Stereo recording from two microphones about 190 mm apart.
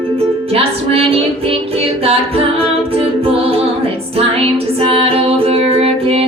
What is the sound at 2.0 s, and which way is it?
A capella, 30° right (ahead or behind).